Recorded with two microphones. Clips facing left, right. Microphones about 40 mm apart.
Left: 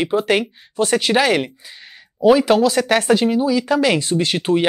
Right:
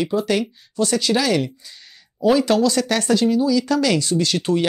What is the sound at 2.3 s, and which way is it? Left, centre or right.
Speech, centre.